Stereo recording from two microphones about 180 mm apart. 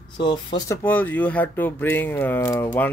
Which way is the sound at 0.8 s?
10° left (ahead or behind).